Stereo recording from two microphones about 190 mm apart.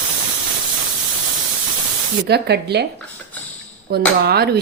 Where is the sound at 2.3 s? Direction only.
60° right (ahead or behind).